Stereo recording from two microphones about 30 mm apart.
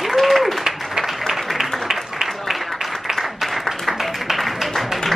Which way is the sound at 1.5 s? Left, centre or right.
Centre.